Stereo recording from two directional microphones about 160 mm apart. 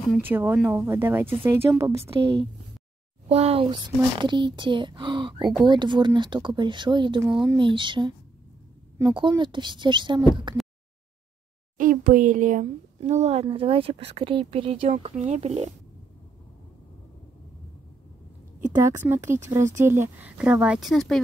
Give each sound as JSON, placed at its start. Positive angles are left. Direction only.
{"t": 0.2, "sound": "speech", "side_deg": -15}
{"t": 3.3, "sound": "speech", "side_deg": -35}
{"t": 9.0, "sound": "speech", "side_deg": -15}
{"t": 9.4, "sound": "speech", "side_deg": -30}
{"t": 11.8, "sound": "speech", "side_deg": -60}
{"t": 18.8, "sound": "speech", "side_deg": -15}